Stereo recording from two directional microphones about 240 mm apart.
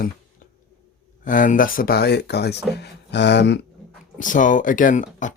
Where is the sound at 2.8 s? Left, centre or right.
Left.